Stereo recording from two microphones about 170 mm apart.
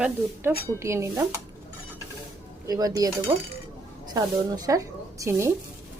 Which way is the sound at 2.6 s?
20° right (ahead or behind).